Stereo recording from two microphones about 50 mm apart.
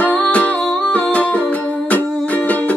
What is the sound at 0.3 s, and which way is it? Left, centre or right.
Humming, left.